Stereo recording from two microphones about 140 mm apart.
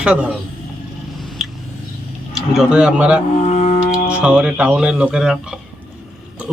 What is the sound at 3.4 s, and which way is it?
Music, 55° left (ahead or behind).